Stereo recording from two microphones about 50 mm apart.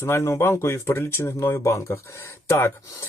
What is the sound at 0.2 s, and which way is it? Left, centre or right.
Speech, left.